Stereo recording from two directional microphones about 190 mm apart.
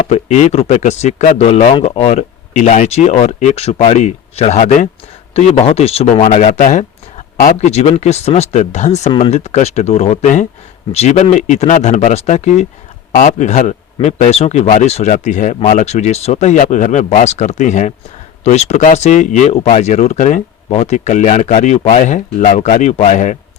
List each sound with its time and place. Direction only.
0.1 s speech: 35° left (ahead or behind)